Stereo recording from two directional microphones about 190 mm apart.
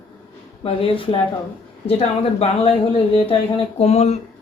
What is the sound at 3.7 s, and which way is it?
Speech, 35° left (ahead or behind).